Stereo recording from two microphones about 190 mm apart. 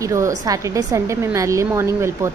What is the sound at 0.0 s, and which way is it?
A woman's voice, 15° right (ahead or behind).